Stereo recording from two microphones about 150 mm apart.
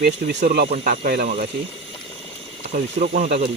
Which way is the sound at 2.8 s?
65° right (ahead or behind).